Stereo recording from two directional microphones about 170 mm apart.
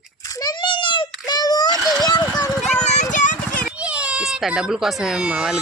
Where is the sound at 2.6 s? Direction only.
5° left (ahead or behind).